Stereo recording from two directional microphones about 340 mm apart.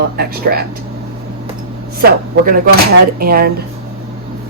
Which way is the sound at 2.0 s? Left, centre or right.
Right.